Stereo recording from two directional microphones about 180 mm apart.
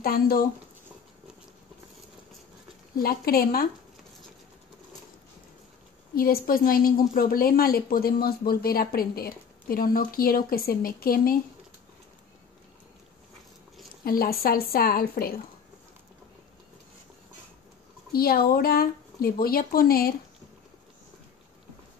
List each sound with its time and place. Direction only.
0.0 s a woman's voice: 55° left (ahead or behind)
3.0 s a woman's voice: 55° left (ahead or behind)
6.1 s a woman's voice: 55° left (ahead or behind)
14.0 s a woman's voice: 55° left (ahead or behind)
18.1 s a woman's voice: 55° left (ahead or behind)